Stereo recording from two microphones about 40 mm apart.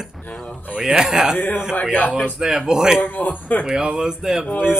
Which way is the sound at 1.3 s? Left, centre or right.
Left.